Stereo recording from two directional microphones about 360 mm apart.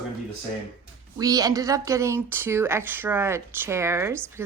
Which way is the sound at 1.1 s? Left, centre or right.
Centre.